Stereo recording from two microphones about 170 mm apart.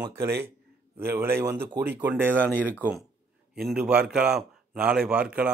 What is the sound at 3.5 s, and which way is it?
A man's voice, 5° right (ahead or behind).